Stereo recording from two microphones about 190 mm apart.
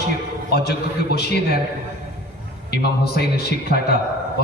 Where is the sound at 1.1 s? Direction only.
55° left (ahead or behind).